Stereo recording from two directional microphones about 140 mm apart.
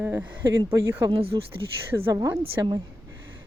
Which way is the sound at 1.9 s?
20° right (ahead or behind).